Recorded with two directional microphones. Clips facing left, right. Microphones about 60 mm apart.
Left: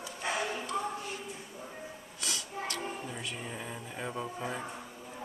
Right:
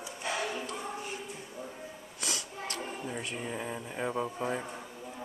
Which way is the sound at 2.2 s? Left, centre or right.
Right.